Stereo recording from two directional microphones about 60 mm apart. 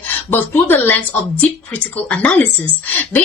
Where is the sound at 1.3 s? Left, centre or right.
Left.